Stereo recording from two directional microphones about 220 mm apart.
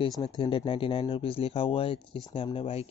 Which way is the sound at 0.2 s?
20° left (ahead or behind).